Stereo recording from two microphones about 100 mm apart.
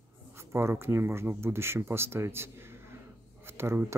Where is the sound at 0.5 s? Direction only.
25° right (ahead or behind).